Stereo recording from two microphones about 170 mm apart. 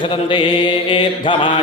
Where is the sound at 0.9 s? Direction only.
30° left (ahead or behind).